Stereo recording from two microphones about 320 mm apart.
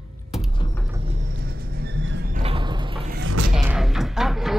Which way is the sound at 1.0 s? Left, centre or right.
Right.